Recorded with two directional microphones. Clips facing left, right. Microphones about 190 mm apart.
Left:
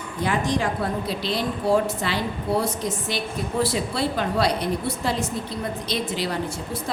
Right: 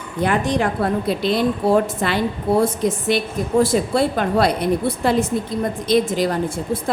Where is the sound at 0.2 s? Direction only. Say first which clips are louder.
Right 5 dB; 60° right (ahead or behind).